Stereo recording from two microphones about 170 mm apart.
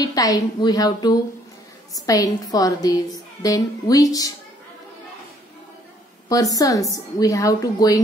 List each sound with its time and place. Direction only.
0.0 s a woman's voice: 20° left (ahead or behind)
6.2 s a woman's voice: 20° left (ahead or behind)